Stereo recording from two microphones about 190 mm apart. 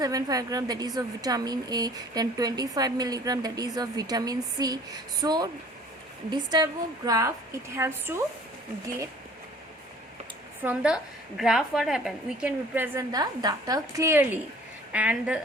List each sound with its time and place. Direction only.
0.0 s a woman's voice: 20° right (ahead or behind)
10.6 s a woman's voice: 5° right (ahead or behind)